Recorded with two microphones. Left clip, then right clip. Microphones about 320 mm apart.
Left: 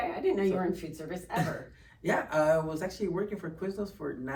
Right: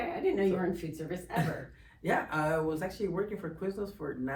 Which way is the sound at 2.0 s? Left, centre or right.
Centre.